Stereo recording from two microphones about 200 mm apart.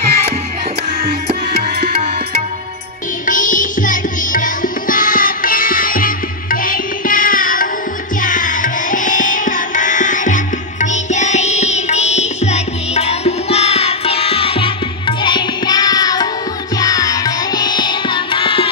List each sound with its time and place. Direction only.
3.3 s music: 40° left (ahead or behind); by 18.7 s 25° left (ahead or behind)